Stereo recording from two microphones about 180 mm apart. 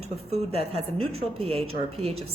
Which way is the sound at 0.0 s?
35° right (ahead or behind).